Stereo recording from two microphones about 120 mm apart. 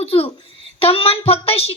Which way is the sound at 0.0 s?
55° left (ahead or behind).